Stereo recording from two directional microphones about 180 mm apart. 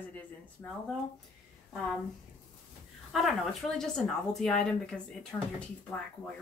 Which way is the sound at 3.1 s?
Centre (ahead or behind).